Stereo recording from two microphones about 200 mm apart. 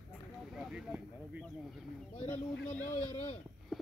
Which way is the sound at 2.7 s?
10° left (ahead or behind).